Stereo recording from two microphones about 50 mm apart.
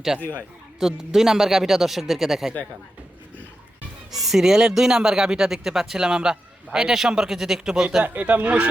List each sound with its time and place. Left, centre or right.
0.8 s speech: centre
4.1 s speech: centre
8.0 s speech: right